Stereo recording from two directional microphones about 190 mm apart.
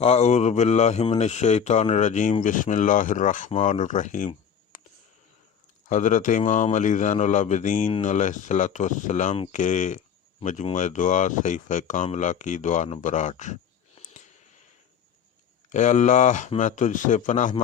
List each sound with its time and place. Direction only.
0.0 s speech: 35° left (ahead or behind)
4.7 s a sound: 45° left (ahead or behind)
5.9 s speech: 40° left (ahead or behind)
15.7 s speech: 40° left (ahead or behind)